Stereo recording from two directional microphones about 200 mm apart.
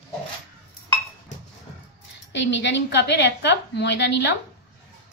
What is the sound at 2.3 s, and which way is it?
A woman's voice, 65° left (ahead or behind).